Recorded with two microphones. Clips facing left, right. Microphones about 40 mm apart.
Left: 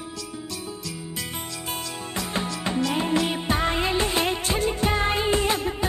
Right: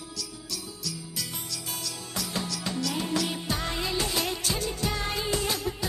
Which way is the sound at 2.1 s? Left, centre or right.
Left.